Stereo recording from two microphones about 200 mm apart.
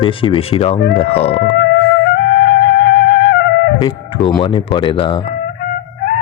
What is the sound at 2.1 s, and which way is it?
Music, 55° left (ahead or behind).